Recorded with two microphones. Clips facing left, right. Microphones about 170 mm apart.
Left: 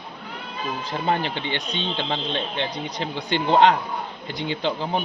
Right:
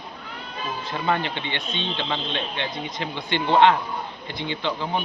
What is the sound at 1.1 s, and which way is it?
Speech, 40° left (ahead or behind).